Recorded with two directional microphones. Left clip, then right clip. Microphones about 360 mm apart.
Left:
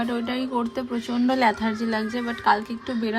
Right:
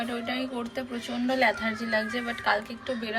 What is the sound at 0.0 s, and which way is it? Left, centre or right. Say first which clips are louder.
A woman's voice: left 4 dB; left.